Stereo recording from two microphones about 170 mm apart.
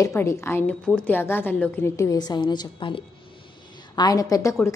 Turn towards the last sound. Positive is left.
turn(degrees=20)  # may be behind; listen again after turning